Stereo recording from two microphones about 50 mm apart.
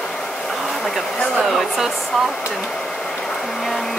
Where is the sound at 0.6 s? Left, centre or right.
Centre.